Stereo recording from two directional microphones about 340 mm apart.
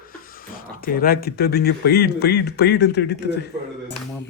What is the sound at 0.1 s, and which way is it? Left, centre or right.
Speech, left.